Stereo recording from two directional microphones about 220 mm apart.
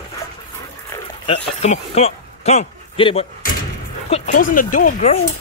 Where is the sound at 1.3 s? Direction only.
30° left (ahead or behind).